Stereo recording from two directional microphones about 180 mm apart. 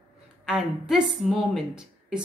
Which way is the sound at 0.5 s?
Centre (ahead or behind).